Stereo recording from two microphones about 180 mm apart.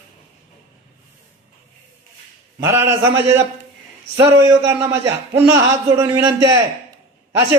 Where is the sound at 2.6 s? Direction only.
15° right (ahead or behind).